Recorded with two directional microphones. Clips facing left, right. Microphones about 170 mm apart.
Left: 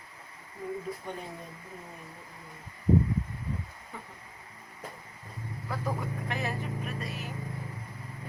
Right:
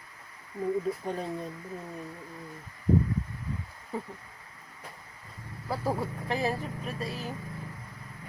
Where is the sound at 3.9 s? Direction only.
35° right (ahead or behind).